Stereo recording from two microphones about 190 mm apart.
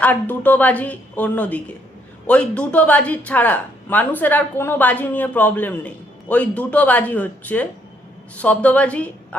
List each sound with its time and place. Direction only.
0.0 s speech: 10° left (ahead or behind)